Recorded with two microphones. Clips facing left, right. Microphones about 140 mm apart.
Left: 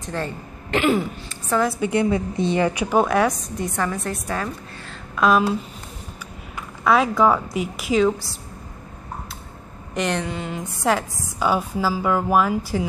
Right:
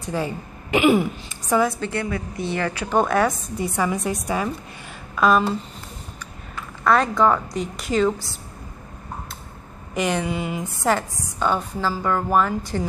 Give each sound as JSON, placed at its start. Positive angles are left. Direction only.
{"t": 0.0, "sound": "a woman's voice", "side_deg": -10}
{"t": 1.8, "sound": "a woman's voice", "side_deg": 15}
{"t": 3.0, "sound": "a woman's voice", "side_deg": 0}
{"t": 5.1, "sound": "a woman's voice", "side_deg": 0}
{"t": 6.8, "sound": "a woman's voice", "side_deg": 5}
{"t": 9.9, "sound": "a woman's voice", "side_deg": -5}